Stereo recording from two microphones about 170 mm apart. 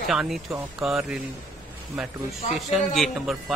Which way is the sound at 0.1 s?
Centre (ahead or behind).